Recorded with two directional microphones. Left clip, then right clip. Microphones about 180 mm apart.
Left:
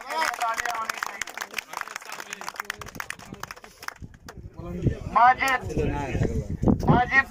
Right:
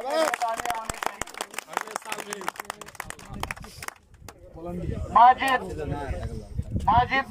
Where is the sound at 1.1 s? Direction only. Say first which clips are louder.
Left 2 dB; 40° right (ahead or behind).